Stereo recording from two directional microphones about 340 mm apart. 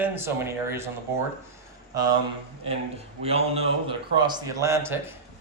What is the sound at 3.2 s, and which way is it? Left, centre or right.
A man's voice, centre.